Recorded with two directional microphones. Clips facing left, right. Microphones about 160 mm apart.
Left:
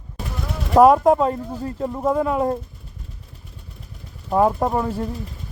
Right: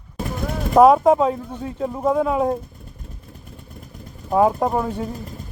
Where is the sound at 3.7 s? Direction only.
50° right (ahead or behind).